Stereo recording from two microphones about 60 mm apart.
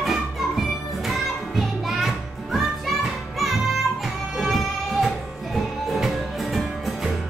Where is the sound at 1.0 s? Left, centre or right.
Centre.